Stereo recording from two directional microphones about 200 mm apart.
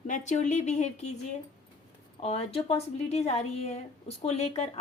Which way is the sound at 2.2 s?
30° left (ahead or behind).